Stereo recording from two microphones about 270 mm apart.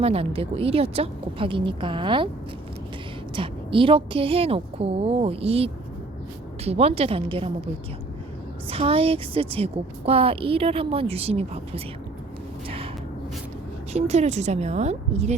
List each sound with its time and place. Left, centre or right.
0.0 s a woman's voice: right
3.3 s a woman's voice: centre
8.7 s a woman's voice: right
12.6 s a sound: centre
13.9 s a woman's voice: right